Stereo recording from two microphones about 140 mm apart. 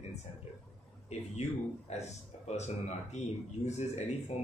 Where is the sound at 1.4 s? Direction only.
60° left (ahead or behind).